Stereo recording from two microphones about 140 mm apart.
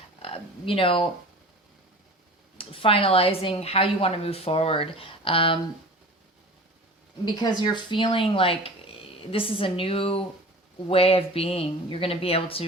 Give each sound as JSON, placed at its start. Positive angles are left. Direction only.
{"t": 0.2, "sound": "speech", "side_deg": 40}
{"t": 2.6, "sound": "a woman's voice", "side_deg": 40}
{"t": 7.3, "sound": "a woman's voice", "side_deg": 30}